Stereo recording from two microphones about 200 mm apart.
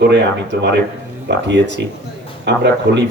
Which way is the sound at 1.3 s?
60° right (ahead or behind).